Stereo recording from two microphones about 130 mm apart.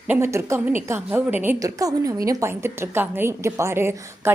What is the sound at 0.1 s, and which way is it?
A woman's voice, 20° right (ahead or behind).